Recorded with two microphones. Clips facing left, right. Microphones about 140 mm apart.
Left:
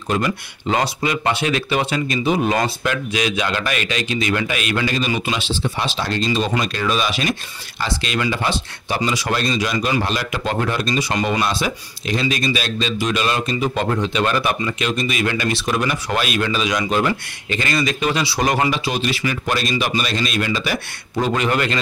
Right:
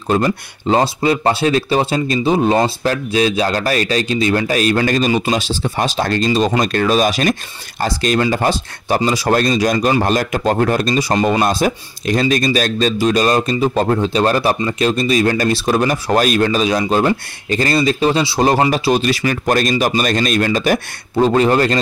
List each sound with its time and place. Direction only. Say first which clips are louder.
0.1 s speech: right 5 dB; 35° right (ahead or behind)
11.4 s speech: right 6 dB; 45° right (ahead or behind)
18.7 s speech: right 6 dB; 40° right (ahead or behind)
21.2 s speech: right 7 dB; 35° right (ahead or behind)